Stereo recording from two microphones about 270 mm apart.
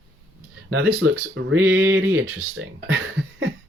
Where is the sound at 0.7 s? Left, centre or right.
Right.